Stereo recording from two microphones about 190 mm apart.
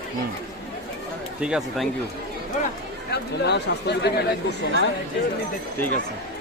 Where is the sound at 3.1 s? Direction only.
60° left (ahead or behind).